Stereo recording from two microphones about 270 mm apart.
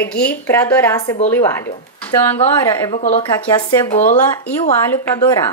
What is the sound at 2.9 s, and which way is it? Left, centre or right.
Speech, left.